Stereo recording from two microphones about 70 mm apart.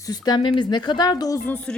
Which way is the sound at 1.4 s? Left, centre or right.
Left.